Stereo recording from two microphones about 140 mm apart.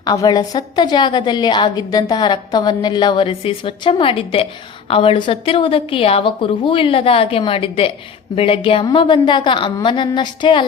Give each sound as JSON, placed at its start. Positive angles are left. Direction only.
{"t": 0.0, "sound": "a woman's voice", "side_deg": 30}